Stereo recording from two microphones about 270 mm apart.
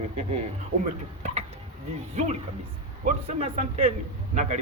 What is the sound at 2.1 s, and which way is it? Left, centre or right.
Speech, right.